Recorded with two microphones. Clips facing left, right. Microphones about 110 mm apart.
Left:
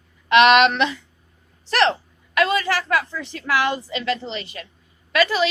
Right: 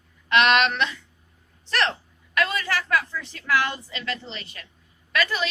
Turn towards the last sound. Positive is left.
turn(degrees=90)